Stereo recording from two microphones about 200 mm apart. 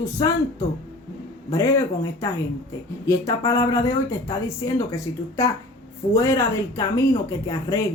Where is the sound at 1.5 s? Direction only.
15° left (ahead or behind).